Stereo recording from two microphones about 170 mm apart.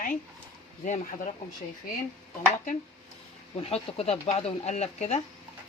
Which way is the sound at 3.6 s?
35° left (ahead or behind).